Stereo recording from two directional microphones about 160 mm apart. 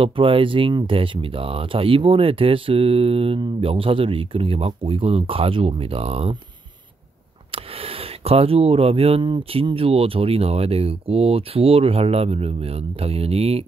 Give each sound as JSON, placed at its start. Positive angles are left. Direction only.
{"t": 0.0, "sound": "speech", "side_deg": -35}
{"t": 7.5, "sound": "speech", "side_deg": -35}